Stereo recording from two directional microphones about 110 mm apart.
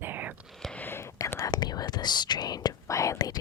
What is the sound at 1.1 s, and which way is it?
Whispering, 30° left (ahead or behind).